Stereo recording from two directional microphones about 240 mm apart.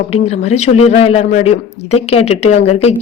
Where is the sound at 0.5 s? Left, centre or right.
Left.